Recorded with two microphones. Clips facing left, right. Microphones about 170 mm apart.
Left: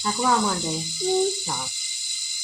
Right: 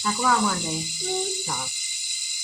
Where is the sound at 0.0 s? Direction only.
15° left (ahead or behind).